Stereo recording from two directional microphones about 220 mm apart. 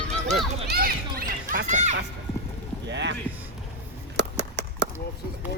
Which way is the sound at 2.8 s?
50° right (ahead or behind).